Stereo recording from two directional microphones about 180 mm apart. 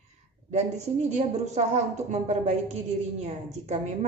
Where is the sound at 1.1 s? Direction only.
40° right (ahead or behind).